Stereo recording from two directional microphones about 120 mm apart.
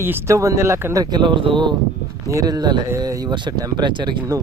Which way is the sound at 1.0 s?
40° right (ahead or behind).